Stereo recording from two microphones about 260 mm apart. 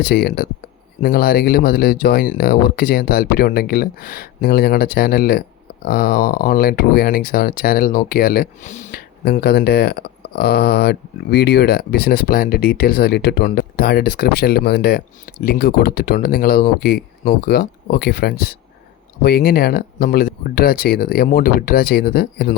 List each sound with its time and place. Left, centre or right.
0.0 s speech: left